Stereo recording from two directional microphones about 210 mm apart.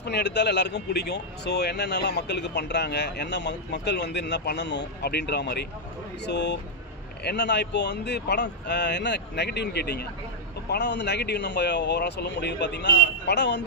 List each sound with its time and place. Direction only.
0.0 s speech: 55° left (ahead or behind)